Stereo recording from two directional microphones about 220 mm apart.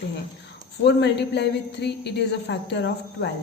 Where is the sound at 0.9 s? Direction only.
50° left (ahead or behind).